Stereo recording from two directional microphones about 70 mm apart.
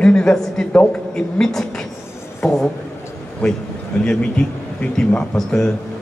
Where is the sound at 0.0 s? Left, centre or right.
Centre.